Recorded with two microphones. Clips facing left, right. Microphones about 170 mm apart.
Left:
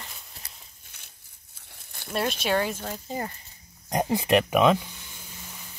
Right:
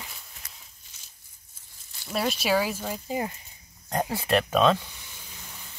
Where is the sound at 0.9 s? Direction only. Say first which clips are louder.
Left 4 dB; 60° left (ahead or behind).